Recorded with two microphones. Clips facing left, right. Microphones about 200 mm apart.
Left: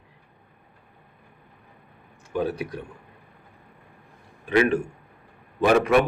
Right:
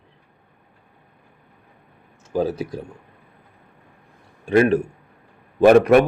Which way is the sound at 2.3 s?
35° right (ahead or behind).